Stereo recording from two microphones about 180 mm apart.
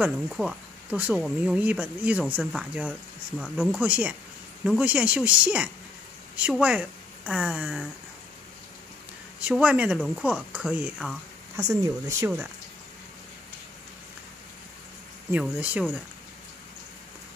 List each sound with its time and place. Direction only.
0.0 s speech: 5° right (ahead or behind)
9.4 s speech: 5° right (ahead or behind)
11.5 s speech: 15° right (ahead or behind)
15.3 s speech: 5° right (ahead or behind)